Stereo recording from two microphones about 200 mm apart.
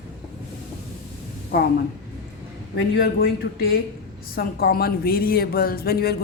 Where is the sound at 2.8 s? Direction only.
55° left (ahead or behind).